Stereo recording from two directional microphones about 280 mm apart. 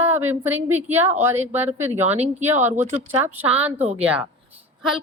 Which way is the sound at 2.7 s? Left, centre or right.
Right.